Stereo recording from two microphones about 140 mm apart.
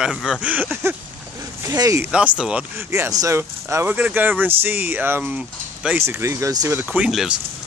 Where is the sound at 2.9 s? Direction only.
25° right (ahead or behind).